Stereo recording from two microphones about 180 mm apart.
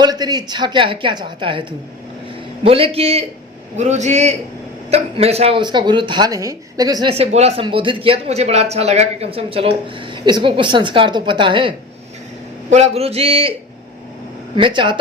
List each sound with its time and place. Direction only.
0.0 s speech: 20° right (ahead or behind)
2.6 s speech: 30° right (ahead or behind)
12.7 s speech: 35° right (ahead or behind)
14.5 s speech: 25° right (ahead or behind)